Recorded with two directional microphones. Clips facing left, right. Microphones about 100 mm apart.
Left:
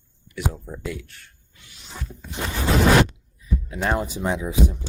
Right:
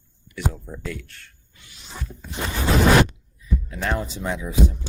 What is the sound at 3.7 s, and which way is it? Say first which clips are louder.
Speech: left 3 dB; 20° left (ahead or behind).